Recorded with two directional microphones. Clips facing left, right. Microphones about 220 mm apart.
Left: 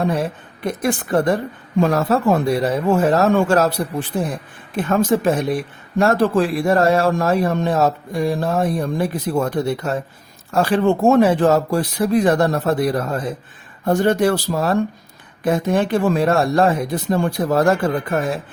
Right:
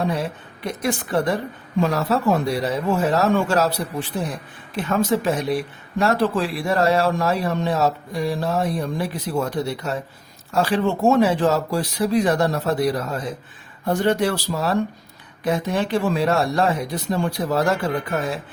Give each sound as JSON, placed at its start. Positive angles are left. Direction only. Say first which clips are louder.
{"t": 0.0, "sound": "speech", "louder": "left 3 dB", "side_deg": 50}
{"t": 4.8, "sound": "speech", "louder": "left 4 dB", "side_deg": 50}